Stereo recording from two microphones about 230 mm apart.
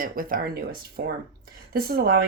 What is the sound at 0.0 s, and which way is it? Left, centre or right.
Speech, right.